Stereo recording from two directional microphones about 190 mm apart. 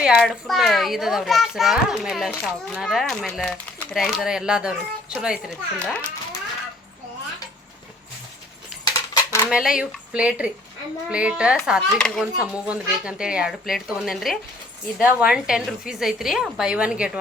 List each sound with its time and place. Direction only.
0.0 s a child's voice: centre (ahead or behind)
5.8 s speech: 5° left (ahead or behind)
8.8 s coin: 15° left (ahead or behind)
9.5 s a child's voice: 5° right (ahead or behind)